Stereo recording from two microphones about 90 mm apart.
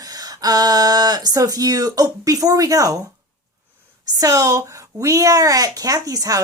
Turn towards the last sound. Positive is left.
turn(degrees=-40)  # may be behind; listen again after turning